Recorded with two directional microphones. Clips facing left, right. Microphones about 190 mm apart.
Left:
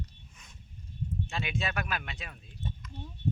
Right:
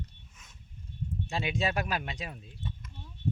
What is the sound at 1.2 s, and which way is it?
Speech, 35° right (ahead or behind).